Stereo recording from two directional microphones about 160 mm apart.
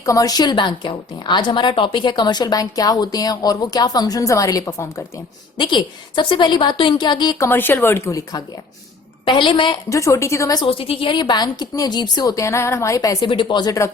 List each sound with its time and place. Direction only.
0.0 s a woman's voice: 20° left (ahead or behind)
5.5 s a woman's voice: 30° left (ahead or behind)
9.9 s a woman's voice: 20° left (ahead or behind)